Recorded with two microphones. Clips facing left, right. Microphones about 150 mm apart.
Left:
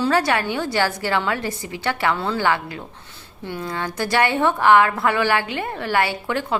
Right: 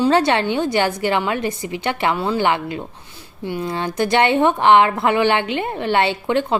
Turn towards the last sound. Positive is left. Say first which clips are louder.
# right 5 dB
turn(degrees=-20)  # may be behind; listen again after turning